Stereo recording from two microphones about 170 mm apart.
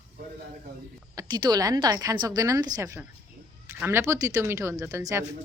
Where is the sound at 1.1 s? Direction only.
25° right (ahead or behind).